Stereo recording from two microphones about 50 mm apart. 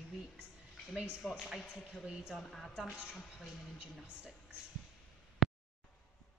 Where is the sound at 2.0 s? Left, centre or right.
Centre.